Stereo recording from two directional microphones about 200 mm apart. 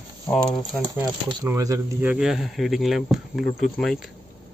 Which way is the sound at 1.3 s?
15° right (ahead or behind).